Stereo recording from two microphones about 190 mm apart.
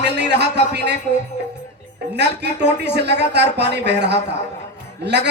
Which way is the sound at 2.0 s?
60° right (ahead or behind).